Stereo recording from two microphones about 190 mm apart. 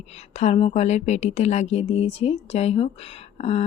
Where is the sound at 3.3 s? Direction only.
35° left (ahead or behind).